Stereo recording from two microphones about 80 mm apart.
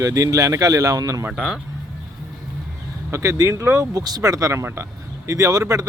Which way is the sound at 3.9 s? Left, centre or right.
Right.